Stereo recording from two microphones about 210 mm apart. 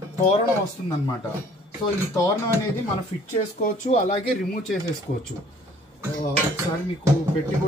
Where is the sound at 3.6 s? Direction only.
35° left (ahead or behind).